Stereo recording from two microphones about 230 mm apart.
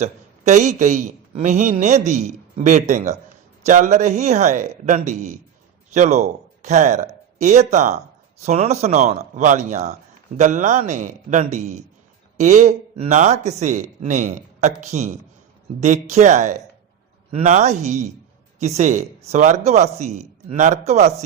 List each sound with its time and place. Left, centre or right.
0.0 s a man's voice: right